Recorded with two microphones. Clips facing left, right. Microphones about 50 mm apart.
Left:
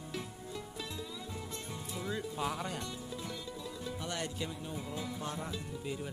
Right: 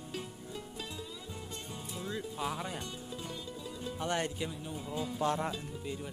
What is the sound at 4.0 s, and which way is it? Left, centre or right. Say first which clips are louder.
Speech: right 7 dB; right.